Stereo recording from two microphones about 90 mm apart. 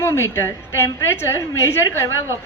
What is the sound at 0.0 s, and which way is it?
A woman's voice, 30° left (ahead or behind).